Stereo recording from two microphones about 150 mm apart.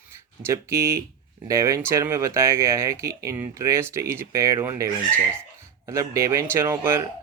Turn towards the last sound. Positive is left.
turn(degrees=-15)  # may be behind; listen again after turning